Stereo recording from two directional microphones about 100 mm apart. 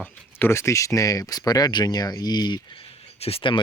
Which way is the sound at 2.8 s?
70° left (ahead or behind).